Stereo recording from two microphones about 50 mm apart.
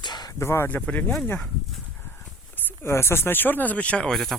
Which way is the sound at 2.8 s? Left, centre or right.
Left.